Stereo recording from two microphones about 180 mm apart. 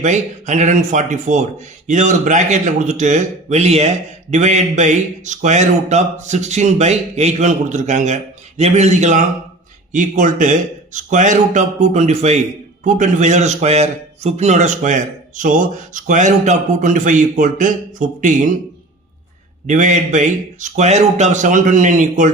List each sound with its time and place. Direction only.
0.0 s a man's voice: 40° right (ahead or behind)
19.6 s a man's voice: 45° right (ahead or behind)